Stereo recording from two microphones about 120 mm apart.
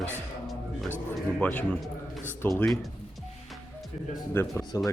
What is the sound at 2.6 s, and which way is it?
Speech, centre (ahead or behind).